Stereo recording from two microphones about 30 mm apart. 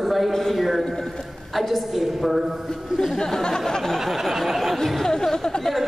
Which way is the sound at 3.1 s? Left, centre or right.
Left.